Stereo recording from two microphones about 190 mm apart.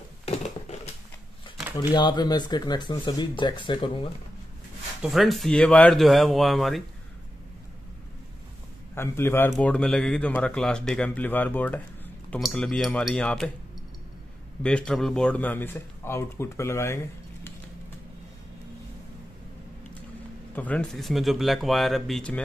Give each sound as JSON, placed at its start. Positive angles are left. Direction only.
{"t": 0.2, "sound": "a sound", "side_deg": 35}
{"t": 1.8, "sound": "speech", "side_deg": 25}
{"t": 5.0, "sound": "speech", "side_deg": 0}
{"t": 8.9, "sound": "speech", "side_deg": 10}
{"t": 14.6, "sound": "speech", "side_deg": 5}
{"t": 20.5, "sound": "speech", "side_deg": 5}